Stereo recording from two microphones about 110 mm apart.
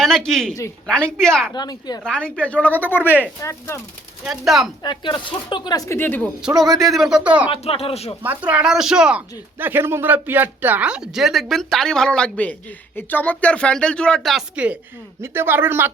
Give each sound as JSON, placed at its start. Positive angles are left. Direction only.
{"t": 0.0, "sound": "a man's voice", "side_deg": 5}
{"t": 1.5, "sound": "speech", "side_deg": 40}
{"t": 2.0, "sound": "speech", "side_deg": 10}
{"t": 4.2, "sound": "speech", "side_deg": -5}
{"t": 4.8, "sound": "speech", "side_deg": 45}
{"t": 6.0, "sound": "speech", "side_deg": 15}
{"t": 6.6, "sound": "speech", "side_deg": 0}
{"t": 7.5, "sound": "speech", "side_deg": 60}
{"t": 8.2, "sound": "a man's voice", "side_deg": -15}
{"t": 14.5, "sound": "a man's voice", "side_deg": -10}